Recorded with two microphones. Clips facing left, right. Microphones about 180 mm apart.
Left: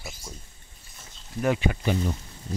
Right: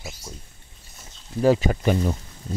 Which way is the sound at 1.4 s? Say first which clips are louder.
Right 6 dB; 35° right (ahead or behind).